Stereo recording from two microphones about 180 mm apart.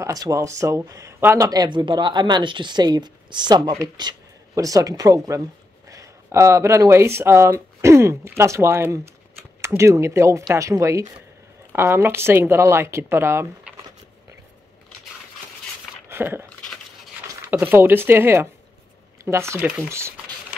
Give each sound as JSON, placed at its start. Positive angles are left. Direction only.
{"t": 0.0, "sound": "speech", "side_deg": -20}
{"t": 16.1, "sound": "speech", "side_deg": -15}
{"t": 17.5, "sound": "speech", "side_deg": -10}